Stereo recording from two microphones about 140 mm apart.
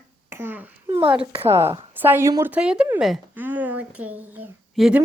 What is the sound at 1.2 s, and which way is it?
A child's voice, 15° right (ahead or behind).